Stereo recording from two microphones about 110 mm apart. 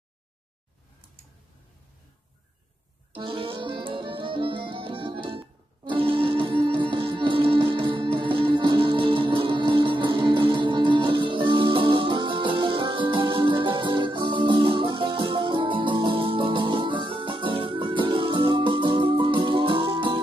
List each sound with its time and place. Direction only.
3.1 s music: 50° right (ahead or behind)